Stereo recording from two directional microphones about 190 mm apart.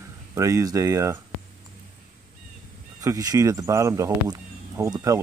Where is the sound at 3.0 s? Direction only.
20° right (ahead or behind).